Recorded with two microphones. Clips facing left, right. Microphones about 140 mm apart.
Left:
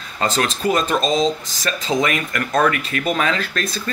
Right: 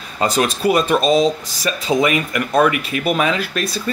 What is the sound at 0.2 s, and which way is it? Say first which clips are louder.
Speech: right 3 dB; 10° right (ahead or behind).